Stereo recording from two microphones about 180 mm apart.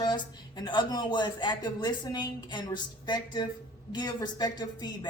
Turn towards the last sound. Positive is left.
turn(degrees=25)  # may be behind; listen again after turning